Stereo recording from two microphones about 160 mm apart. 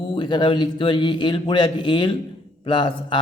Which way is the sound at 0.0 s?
30° left (ahead or behind).